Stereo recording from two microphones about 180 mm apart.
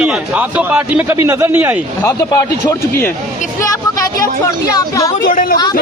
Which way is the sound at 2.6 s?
15° left (ahead or behind).